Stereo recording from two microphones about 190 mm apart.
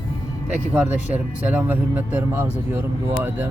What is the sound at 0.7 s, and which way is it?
Speech, 10° right (ahead or behind).